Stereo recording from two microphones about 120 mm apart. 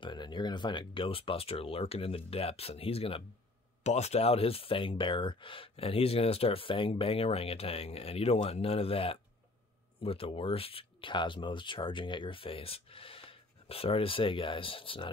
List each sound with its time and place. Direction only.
0.0 s speech: 40° left (ahead or behind)
3.8 s speech: 65° left (ahead or behind); by 15.0 s 45° left (ahead or behind)